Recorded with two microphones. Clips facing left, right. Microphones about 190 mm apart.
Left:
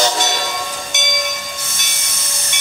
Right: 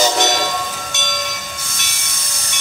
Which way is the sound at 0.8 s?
15° left (ahead or behind).